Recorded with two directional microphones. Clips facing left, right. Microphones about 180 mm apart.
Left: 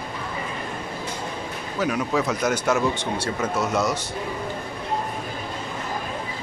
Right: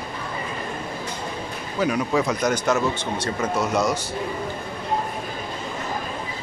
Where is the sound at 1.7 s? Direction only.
Centre (ahead or behind).